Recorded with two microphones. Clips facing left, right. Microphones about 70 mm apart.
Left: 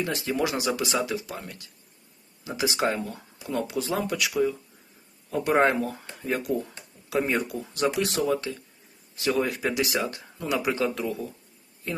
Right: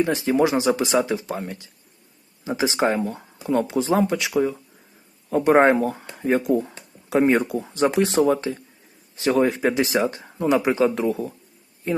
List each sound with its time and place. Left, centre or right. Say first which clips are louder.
0.0 s speech: right 8 dB; right